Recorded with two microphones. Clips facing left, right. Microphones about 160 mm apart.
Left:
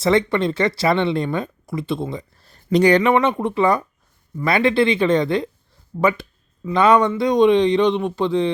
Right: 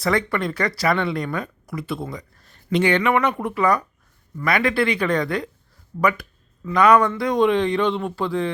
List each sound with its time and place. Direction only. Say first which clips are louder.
0.0 s speech: left 5 dB; 25° left (ahead or behind)